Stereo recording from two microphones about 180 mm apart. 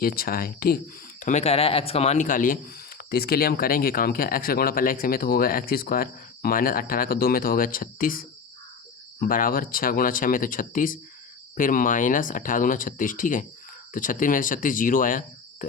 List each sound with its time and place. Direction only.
0.0 s speech: 55° left (ahead or behind)
1.2 s speech: 40° left (ahead or behind)